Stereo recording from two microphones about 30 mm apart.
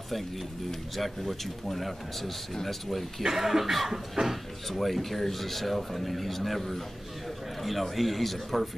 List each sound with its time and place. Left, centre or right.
0.7 s speech: centre
3.3 s cough: centre
4.2 s speech: right
4.6 s speech: centre